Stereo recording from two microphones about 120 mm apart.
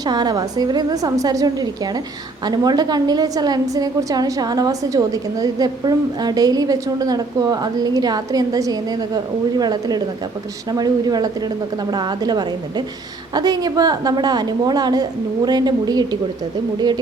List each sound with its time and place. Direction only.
0.0 s a woman's voice: 35° right (ahead or behind)